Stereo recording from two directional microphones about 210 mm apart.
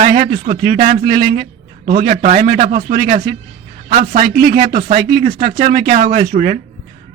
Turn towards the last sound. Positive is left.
turn(degrees=-35)  # may be behind; listen again after turning